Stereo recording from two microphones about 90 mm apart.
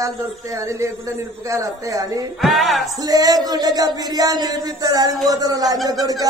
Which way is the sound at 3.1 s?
45° right (ahead or behind).